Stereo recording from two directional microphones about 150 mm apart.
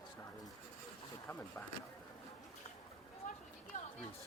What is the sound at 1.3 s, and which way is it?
Speech, 15° left (ahead or behind).